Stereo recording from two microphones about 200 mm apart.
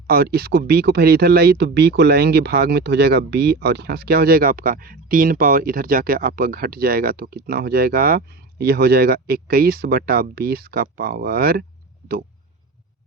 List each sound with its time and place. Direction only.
0.1 s speech: 50° right (ahead or behind)